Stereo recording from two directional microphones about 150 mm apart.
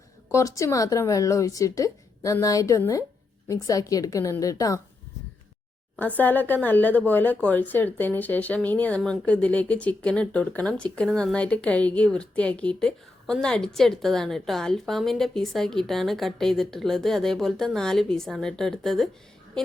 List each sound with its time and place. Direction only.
0.3 s speech: 20° left (ahead or behind)
6.0 s speech: 10° left (ahead or behind)